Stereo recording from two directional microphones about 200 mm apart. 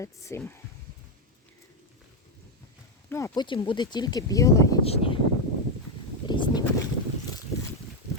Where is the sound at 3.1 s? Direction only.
15° left (ahead or behind).